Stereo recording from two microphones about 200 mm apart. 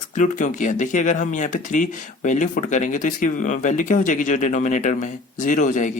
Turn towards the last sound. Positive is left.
turn(degrees=40)  # may be behind; listen again after turning